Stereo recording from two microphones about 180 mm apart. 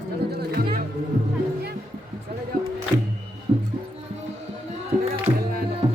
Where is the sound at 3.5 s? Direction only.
20° right (ahead or behind).